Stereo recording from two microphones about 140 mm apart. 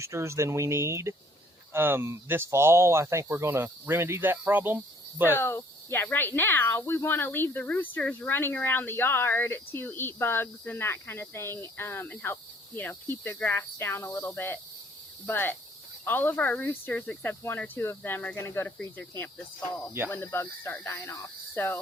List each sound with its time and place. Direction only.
0.0 s speech: 20° right (ahead or behind)
5.4 s speech: 15° left (ahead or behind)